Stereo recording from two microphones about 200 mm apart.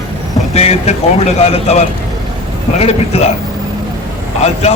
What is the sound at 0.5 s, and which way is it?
A man's voice, 35° left (ahead or behind).